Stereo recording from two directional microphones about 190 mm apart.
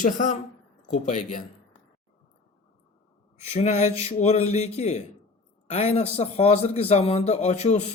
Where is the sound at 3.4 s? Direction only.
35° left (ahead or behind).